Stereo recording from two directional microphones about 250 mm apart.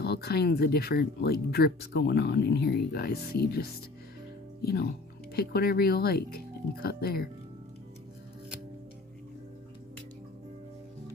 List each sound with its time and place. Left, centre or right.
0.0 s speech: left